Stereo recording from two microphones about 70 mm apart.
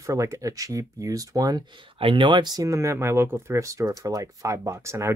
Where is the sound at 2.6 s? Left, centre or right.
Right.